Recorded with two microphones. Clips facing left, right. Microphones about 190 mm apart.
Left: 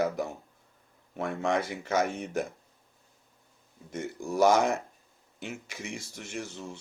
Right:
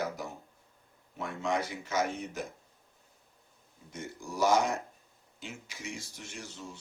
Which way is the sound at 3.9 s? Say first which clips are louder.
Left 8 dB; 60° left (ahead or behind).